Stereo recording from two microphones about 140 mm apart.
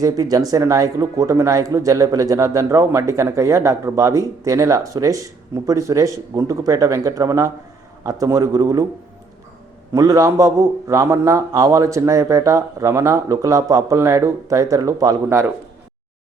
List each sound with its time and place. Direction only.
0.0 s speech: 25° right (ahead or behind)
9.9 s speech: 25° right (ahead or behind)